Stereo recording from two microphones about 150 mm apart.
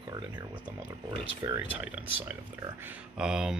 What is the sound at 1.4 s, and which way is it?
Speech, 25° right (ahead or behind).